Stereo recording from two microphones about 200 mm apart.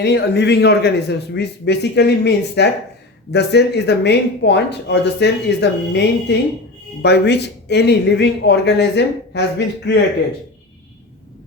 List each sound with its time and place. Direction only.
0.0 s speech: 55° left (ahead or behind)